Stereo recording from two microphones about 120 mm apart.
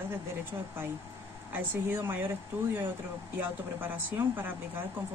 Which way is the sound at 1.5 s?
15° right (ahead or behind).